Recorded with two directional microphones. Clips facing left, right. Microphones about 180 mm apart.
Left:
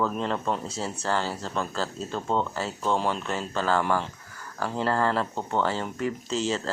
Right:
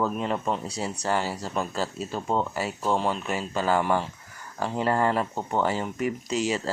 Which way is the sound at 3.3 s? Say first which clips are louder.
Right 1 dB; 15° right (ahead or behind).